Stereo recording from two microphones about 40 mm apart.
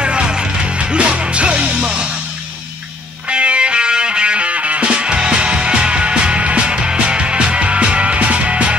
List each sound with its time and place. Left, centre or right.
0.0 s music: right
3.3 s music: right